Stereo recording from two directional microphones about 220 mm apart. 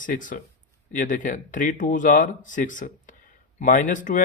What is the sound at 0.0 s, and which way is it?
Speech, 35° left (ahead or behind).